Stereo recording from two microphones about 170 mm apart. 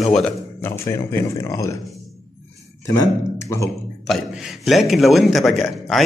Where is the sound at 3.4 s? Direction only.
15° left (ahead or behind).